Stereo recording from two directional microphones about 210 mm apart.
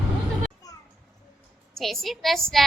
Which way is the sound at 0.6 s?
15° left (ahead or behind).